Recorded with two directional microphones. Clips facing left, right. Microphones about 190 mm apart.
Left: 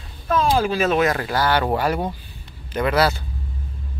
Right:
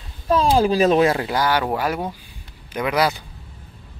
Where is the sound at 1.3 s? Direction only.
10° right (ahead or behind).